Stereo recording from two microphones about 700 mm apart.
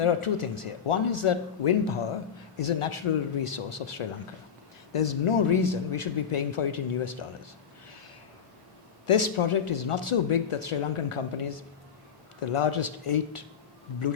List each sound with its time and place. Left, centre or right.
0.0 s speech: left
9.0 s speech: left